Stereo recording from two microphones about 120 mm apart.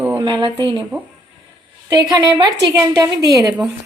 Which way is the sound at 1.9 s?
35° right (ahead or behind).